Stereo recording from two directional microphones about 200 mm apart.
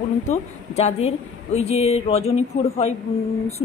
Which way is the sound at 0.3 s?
35° left (ahead or behind).